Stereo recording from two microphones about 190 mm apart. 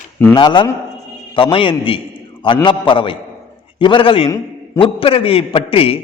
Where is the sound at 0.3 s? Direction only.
25° left (ahead or behind).